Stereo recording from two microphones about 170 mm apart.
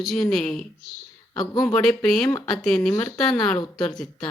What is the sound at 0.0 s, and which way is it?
A woman's voice, centre (ahead or behind).